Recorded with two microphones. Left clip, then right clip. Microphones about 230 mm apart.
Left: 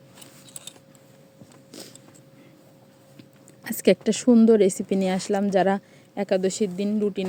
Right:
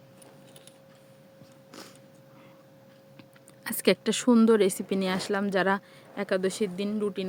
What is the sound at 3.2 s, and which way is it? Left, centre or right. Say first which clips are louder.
Speech: left 4 dB; centre.